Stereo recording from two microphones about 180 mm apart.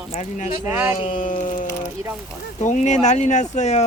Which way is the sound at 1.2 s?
45° left (ahead or behind).